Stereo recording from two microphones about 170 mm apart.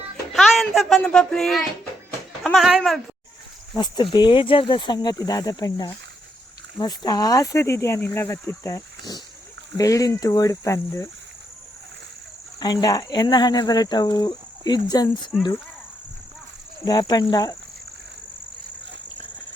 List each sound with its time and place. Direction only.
0.3 s speech: centre (ahead or behind)
3.8 s speech: 25° left (ahead or behind)
12.5 s speech: 25° left (ahead or behind)
16.8 s speech: 25° left (ahead or behind)